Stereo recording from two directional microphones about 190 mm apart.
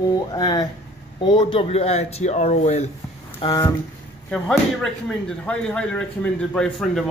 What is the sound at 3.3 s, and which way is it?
Speech, 25° left (ahead or behind).